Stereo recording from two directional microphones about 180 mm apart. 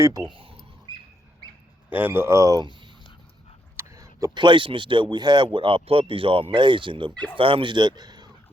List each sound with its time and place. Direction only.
0.0 s speech: 20° right (ahead or behind)
0.9 s bird: 25° right (ahead or behind)
1.9 s speech: 10° right (ahead or behind); by 7.1 s 25° right (ahead or behind)
7.1 s speech: 5° left (ahead or behind)
7.3 s speech: 30° right (ahead or behind)